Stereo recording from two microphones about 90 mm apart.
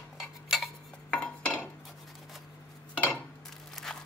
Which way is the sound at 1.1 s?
10° left (ahead or behind).